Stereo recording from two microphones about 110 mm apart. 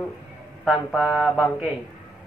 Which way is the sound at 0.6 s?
Centre (ahead or behind).